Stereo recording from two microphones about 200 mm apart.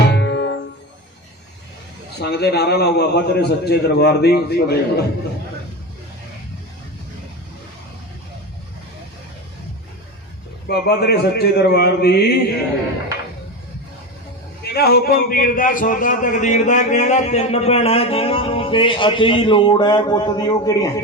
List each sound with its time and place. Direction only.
0.1 s music: 60° left (ahead or behind)
2.1 s a man's voice: 55° left (ahead or behind)
10.7 s a man's voice: 55° left (ahead or behind)
14.7 s a man's voice: 50° left (ahead or behind); by 21.0 s 20° left (ahead or behind)